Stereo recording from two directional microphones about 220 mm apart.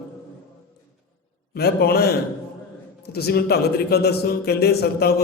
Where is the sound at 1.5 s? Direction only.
45° left (ahead or behind).